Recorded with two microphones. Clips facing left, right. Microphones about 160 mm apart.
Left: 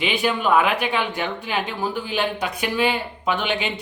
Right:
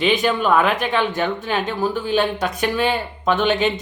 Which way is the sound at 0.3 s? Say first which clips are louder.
Left 2 dB; 45° right (ahead or behind).